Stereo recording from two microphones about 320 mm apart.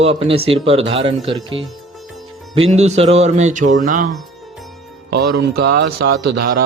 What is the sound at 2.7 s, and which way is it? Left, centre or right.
Speech, centre.